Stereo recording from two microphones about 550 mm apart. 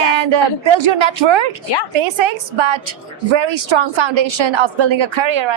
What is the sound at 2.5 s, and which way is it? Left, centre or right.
A woman's voice, right.